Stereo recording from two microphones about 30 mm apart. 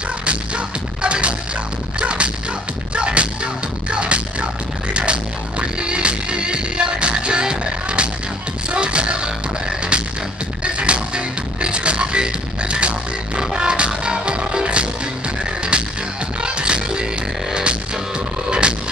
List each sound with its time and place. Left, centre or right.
0.2 s music: right
10.6 s music: right
18.5 s music: right